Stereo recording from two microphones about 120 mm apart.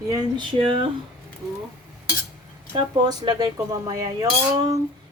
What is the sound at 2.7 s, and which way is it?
Speech, 35° right (ahead or behind).